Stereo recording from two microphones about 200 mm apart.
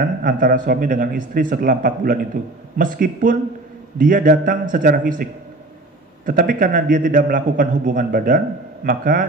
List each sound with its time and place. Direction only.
0.0 s a man's voice: 45° right (ahead or behind)